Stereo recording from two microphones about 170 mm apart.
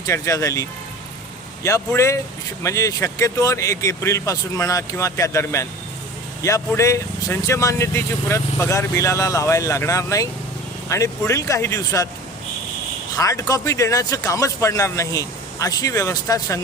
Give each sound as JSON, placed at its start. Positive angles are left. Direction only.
{"t": 0.0, "sound": "speech", "side_deg": 20}
{"t": 13.1, "sound": "speech", "side_deg": 20}